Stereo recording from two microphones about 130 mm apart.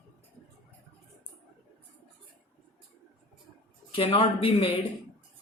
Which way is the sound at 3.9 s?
45° left (ahead or behind).